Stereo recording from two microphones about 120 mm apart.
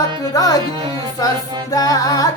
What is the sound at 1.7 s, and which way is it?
Music, 30° left (ahead or behind).